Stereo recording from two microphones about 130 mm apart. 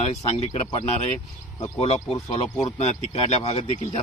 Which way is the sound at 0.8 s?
60° left (ahead or behind).